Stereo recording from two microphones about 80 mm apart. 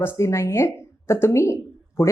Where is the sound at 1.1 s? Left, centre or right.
Left.